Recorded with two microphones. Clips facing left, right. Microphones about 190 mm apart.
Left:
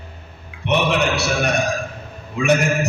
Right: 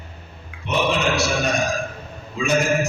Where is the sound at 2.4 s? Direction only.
65° left (ahead or behind).